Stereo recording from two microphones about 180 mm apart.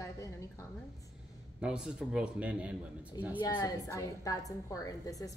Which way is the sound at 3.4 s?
20° left (ahead or behind).